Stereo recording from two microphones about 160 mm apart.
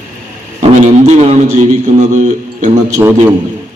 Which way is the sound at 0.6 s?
45° right (ahead or behind).